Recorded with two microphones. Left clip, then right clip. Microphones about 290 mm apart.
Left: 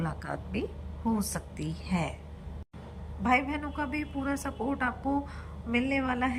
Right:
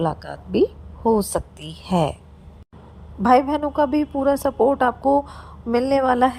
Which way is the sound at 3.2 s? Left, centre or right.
Right.